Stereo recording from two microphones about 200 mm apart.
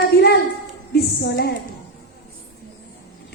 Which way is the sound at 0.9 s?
55° left (ahead or behind).